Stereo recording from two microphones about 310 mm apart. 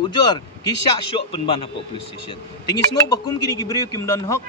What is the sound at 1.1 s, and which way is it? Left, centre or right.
Speech, centre.